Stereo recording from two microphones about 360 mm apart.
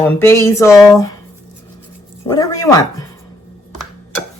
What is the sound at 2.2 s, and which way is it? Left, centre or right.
Speech, centre.